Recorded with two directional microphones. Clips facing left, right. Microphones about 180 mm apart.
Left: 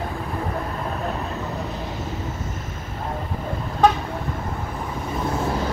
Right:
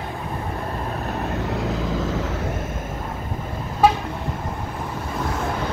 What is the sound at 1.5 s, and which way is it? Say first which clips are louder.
Vehicle: right 5 dB; 90° right.